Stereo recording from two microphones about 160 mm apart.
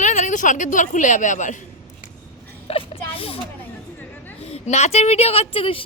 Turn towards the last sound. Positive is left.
turn(degrees=35)  # may be behind; listen again after turning